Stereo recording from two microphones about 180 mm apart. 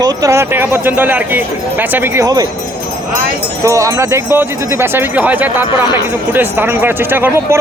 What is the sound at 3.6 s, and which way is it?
Speech, 15° right (ahead or behind).